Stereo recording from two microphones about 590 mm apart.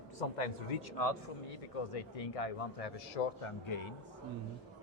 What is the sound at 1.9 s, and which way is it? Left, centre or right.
A man's voice, left.